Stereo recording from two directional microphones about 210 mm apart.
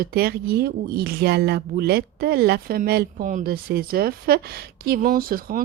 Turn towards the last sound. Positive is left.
turn(degrees=-45)  # may be behind; listen again after turning